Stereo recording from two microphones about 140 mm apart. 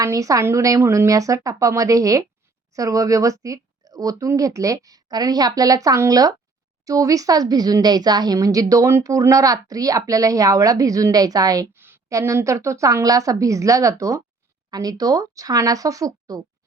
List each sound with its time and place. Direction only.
0.0 s speech: 25° right (ahead or behind)